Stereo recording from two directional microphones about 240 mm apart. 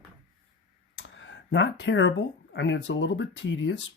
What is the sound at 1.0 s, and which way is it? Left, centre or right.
Speech, left.